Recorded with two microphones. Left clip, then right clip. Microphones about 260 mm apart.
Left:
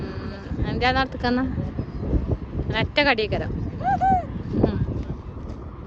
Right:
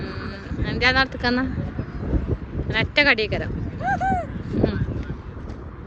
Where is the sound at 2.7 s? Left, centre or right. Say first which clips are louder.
Right 2 dB; centre.